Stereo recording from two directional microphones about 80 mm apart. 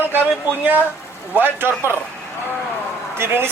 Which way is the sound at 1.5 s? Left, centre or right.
Right.